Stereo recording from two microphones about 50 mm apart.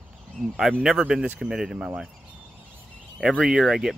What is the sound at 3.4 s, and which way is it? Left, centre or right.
Speech, centre.